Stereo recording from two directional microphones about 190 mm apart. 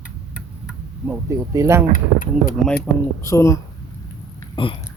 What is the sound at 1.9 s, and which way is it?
Speech, 45° left (ahead or behind).